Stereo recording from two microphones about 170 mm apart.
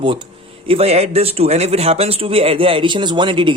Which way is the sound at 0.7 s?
35° right (ahead or behind).